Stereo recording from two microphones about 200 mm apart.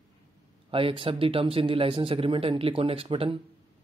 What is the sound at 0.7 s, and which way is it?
Speech, 25° right (ahead or behind).